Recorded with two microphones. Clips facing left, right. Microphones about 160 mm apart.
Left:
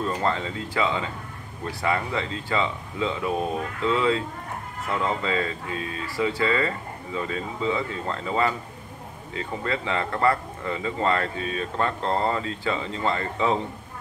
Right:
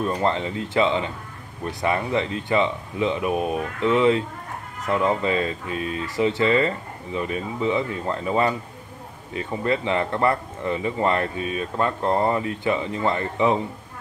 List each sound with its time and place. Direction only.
0.0 s speech: 20° right (ahead or behind)